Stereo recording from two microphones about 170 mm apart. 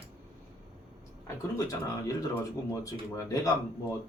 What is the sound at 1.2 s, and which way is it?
Speech, 20° left (ahead or behind).